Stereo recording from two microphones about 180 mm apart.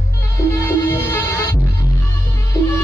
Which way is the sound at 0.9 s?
15° left (ahead or behind).